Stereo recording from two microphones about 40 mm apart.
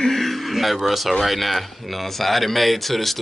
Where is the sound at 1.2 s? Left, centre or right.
Centre.